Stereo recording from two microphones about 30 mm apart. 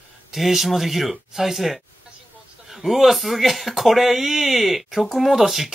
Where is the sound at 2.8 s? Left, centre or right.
Centre.